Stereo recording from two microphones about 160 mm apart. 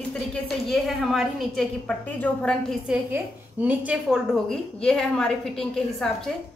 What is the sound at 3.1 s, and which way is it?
A woman's voice, 10° right (ahead or behind).